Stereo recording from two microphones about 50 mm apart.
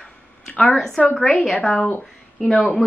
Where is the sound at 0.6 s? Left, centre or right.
Centre.